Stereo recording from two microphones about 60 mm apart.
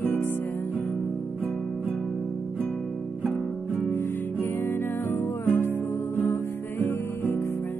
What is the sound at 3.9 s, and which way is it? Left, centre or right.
Music, left.